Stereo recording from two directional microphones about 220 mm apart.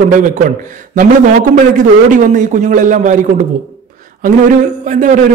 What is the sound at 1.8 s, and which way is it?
A man's voice, 35° right (ahead or behind).